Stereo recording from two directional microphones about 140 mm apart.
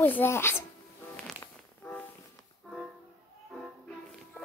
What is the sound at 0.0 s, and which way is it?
Speech, 15° left (ahead or behind).